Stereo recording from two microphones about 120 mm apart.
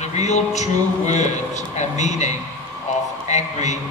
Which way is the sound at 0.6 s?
75° left (ahead or behind).